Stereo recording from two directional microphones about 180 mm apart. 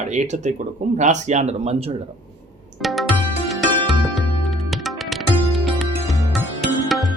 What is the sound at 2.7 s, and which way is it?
Music, centre (ahead or behind).